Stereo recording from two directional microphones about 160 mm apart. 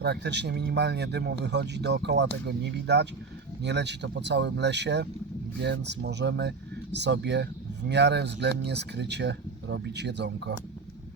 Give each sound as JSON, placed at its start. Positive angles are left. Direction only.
{"t": 0.0, "sound": "speech", "side_deg": -90}